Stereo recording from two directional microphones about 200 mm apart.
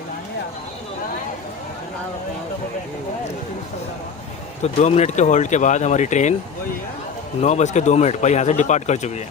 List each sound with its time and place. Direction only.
4.6 s speech: 35° left (ahead or behind)
7.4 s speech: 35° left (ahead or behind)